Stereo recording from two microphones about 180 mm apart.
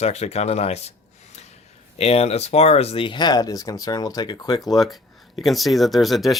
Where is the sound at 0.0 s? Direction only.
35° left (ahead or behind); by 4.8 s 20° left (ahead or behind).